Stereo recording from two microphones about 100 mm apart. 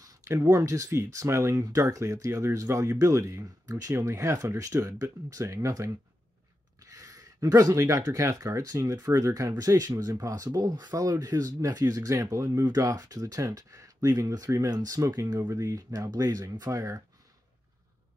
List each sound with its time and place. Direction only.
0.0 s speech: 35° right (ahead or behind)